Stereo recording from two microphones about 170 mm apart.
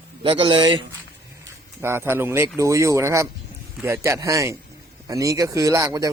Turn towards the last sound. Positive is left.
turn(degrees=-20)  # may be behind; listen again after turning